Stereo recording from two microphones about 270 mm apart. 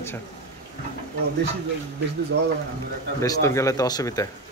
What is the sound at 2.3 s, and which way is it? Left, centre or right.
Speech, right.